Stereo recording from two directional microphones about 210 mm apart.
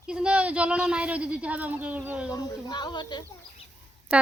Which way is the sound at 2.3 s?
20° left (ahead or behind).